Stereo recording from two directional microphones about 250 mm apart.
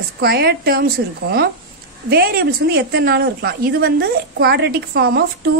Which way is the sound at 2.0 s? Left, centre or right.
Right.